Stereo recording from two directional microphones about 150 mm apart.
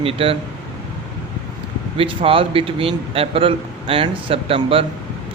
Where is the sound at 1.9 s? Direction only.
35° right (ahead or behind).